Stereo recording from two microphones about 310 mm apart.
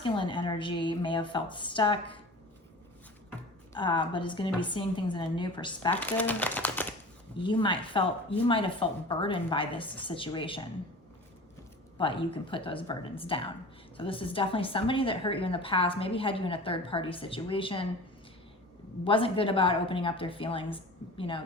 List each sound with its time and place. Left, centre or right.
0.0 s a woman's voice: centre
3.8 s a woman's voice: centre
11.9 s a woman's voice: centre
19.0 s a woman's voice: centre